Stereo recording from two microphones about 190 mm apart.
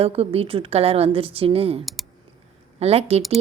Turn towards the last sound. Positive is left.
turn(degrees=-30)  # may be behind; listen again after turning